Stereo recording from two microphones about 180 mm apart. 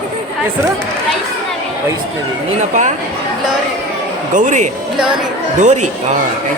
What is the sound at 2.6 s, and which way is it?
Speech, 45° right (ahead or behind).